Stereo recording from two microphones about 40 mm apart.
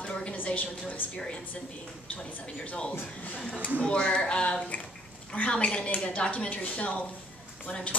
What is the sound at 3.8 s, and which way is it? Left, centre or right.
A woman's voice, left.